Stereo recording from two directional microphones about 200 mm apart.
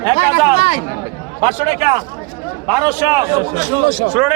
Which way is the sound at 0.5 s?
35° left (ahead or behind).